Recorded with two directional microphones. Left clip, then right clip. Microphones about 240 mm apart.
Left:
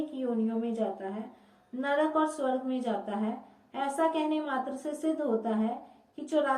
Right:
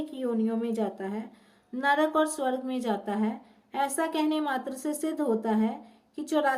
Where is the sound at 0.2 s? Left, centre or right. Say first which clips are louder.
Right 3 dB; right.